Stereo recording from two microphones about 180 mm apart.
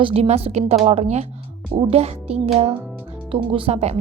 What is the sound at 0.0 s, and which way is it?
Speech, 35° right (ahead or behind).